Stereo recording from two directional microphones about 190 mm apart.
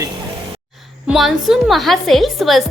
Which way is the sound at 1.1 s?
Centre (ahead or behind).